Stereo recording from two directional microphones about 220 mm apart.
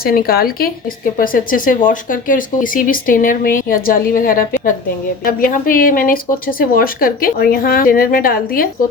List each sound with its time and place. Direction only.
0.0 s a woman's voice: 40° left (ahead or behind)